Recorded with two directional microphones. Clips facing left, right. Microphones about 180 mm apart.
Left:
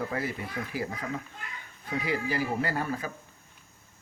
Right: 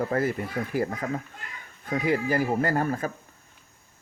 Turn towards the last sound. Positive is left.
turn(degrees=-45)  # may be behind; listen again after turning